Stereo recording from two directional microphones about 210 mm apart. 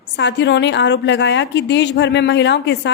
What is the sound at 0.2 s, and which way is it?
A woman's voice, 55° left (ahead or behind).